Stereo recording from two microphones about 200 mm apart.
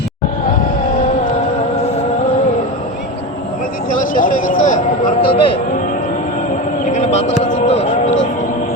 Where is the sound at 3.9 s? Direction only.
40° left (ahead or behind).